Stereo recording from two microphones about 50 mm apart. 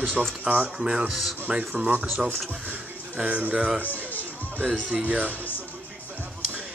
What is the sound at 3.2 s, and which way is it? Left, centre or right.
Speech, right.